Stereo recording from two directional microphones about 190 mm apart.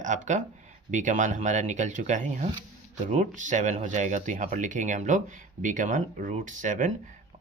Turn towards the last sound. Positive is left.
turn(degrees=-40)  # may be behind; listen again after turning